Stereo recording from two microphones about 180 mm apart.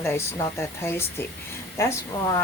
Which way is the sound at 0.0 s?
15° left (ahead or behind).